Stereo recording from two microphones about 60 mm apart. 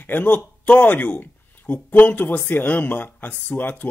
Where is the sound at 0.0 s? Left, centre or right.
Left.